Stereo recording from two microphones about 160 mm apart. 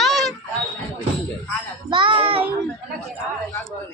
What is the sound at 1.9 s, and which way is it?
Speech, 30° right (ahead or behind).